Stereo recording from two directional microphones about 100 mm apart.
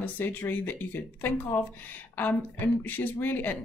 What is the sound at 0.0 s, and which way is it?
Speech, 20° left (ahead or behind).